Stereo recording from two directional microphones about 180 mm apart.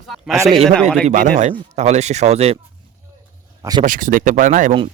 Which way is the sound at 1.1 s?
40° right (ahead or behind).